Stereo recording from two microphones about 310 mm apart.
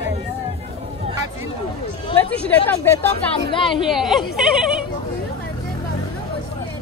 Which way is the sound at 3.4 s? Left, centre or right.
Centre.